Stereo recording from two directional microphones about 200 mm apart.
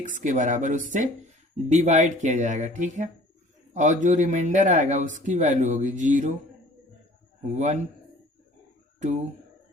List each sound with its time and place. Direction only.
0.0 s speech: 40° right (ahead or behind)
7.4 s speech: 35° right (ahead or behind)